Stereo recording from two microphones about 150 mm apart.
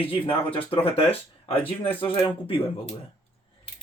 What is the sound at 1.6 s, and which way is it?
Speech, 10° left (ahead or behind).